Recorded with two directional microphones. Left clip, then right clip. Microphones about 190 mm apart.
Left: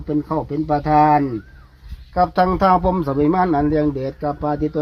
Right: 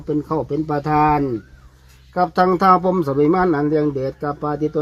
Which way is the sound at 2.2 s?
10° left (ahead or behind).